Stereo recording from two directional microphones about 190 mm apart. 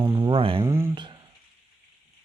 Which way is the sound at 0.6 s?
15° right (ahead or behind).